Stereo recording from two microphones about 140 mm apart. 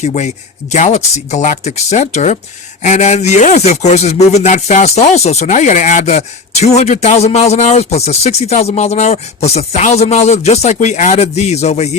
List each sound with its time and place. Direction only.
0.0 s speech: 55° left (ahead or behind)